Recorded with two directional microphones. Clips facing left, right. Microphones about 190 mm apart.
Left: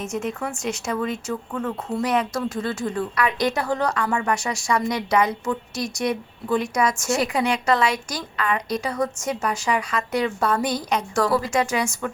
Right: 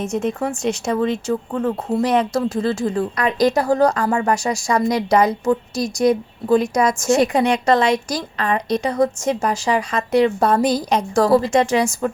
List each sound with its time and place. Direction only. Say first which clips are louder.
0.0 s a woman's voice: right 6 dB; 30° right (ahead or behind)